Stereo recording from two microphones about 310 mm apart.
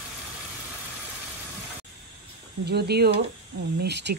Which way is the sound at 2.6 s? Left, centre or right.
Right.